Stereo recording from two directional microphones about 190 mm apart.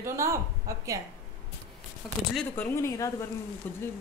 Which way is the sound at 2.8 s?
15° left (ahead or behind).